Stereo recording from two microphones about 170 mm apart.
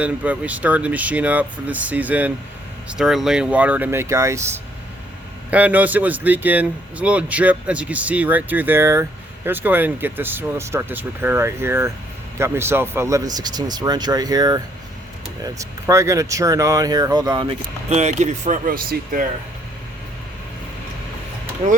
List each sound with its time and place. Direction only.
0.0 s speech: 10° right (ahead or behind); by 17.6 s 25° right (ahead or behind)
17.8 s speech: 40° right (ahead or behind); by 19.2 s 55° right (ahead or behind)